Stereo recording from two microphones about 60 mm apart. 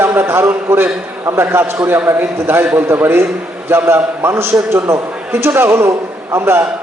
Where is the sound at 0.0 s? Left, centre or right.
Right.